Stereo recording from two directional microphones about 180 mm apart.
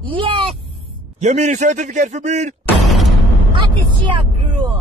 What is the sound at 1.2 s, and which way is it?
A man's voice, 40° right (ahead or behind).